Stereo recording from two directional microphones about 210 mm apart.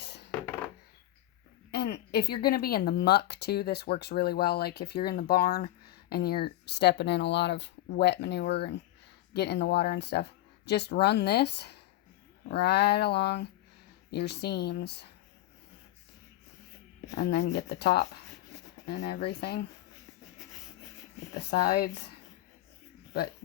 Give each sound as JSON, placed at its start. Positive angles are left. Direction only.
{"t": 0.0, "sound": "a sound", "side_deg": 55}
{"t": 1.7, "sound": "speech", "side_deg": 50}
{"t": 17.2, "sound": "speech", "side_deg": 55}
{"t": 21.5, "sound": "speech", "side_deg": 45}